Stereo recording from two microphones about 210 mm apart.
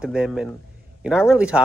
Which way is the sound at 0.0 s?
5° right (ahead or behind).